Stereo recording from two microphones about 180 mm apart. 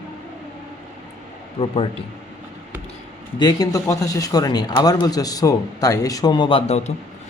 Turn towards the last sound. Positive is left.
turn(degrees=35)  # may be behind; listen again after turning